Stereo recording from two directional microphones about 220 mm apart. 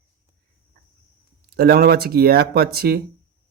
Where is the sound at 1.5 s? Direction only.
45° right (ahead or behind).